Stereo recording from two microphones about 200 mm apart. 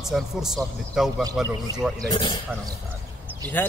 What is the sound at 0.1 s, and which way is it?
A man's voice, centre (ahead or behind).